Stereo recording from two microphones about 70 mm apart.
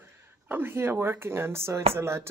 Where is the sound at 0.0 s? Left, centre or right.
Right.